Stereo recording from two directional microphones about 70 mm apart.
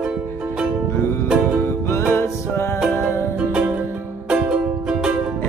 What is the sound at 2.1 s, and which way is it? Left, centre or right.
Music, left.